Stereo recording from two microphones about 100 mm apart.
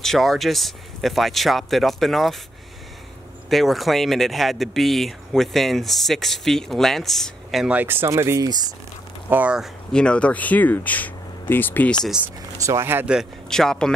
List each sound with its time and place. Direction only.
0.0 s speech: centre (ahead or behind)
3.4 s speech: centre (ahead or behind)
7.6 s speech: 15° right (ahead or behind)
8.5 s speech: 45° right (ahead or behind)
9.3 s speech: 15° right (ahead or behind)
9.9 s speech: 10° left (ahead or behind)
12.6 s speech: 25° right (ahead or behind)
13.0 s speech: 5° right (ahead or behind)
13.5 s speech: 5° left (ahead or behind)